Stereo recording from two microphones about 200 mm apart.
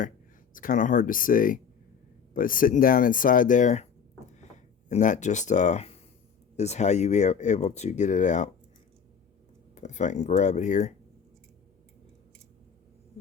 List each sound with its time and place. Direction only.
0.5 s speech: 45° left (ahead or behind)
4.9 s speech: 35° left (ahead or behind)
9.7 s speech: 35° left (ahead or behind)